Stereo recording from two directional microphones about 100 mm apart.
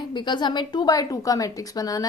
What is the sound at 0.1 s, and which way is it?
A woman's voice, 50° left (ahead or behind).